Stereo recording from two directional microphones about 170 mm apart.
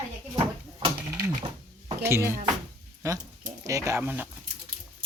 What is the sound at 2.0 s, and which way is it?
Speech, 15° right (ahead or behind).